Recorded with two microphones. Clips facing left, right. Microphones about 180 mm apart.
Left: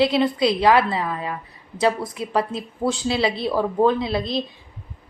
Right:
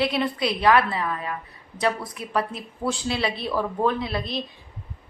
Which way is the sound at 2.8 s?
30° left (ahead or behind).